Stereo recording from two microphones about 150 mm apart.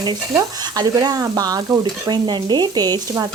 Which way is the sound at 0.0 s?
25° right (ahead or behind).